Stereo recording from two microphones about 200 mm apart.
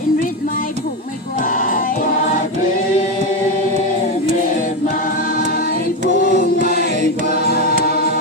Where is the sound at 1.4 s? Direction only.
40° left (ahead or behind).